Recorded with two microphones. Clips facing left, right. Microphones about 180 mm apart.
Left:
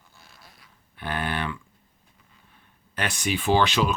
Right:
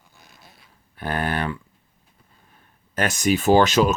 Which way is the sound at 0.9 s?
40° right (ahead or behind).